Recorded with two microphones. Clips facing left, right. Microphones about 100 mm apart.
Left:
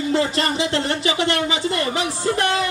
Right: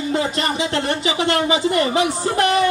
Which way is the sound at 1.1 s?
25° right (ahead or behind).